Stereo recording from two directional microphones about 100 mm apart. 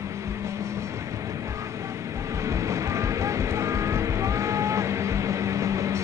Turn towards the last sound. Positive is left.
turn(degrees=-30)  # may be behind; listen again after turning